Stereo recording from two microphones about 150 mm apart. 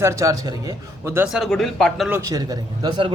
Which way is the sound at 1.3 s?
Centre (ahead or behind).